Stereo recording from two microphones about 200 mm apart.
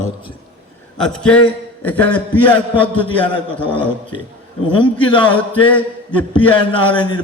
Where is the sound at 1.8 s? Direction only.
5° left (ahead or behind).